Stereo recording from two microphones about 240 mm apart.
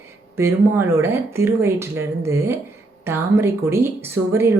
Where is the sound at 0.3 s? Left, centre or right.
Centre.